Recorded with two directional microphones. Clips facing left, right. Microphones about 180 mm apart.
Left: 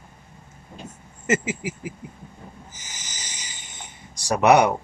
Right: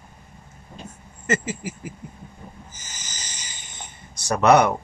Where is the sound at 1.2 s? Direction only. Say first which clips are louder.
Left 2 dB; 15° left (ahead or behind).